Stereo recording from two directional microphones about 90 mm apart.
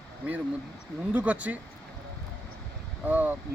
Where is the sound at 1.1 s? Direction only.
15° right (ahead or behind).